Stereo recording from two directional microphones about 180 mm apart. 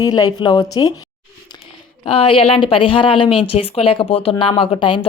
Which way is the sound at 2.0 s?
30° left (ahead or behind).